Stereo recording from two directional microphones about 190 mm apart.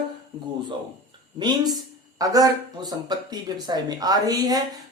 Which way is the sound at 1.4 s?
20° right (ahead or behind).